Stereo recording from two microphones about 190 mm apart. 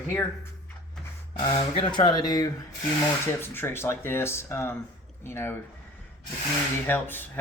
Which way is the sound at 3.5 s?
10° left (ahead or behind).